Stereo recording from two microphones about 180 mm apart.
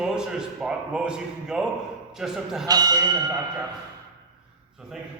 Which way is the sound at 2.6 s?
20° right (ahead or behind).